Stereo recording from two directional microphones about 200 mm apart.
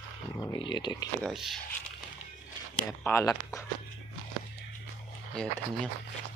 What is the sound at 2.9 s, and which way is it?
Speech, 15° left (ahead or behind).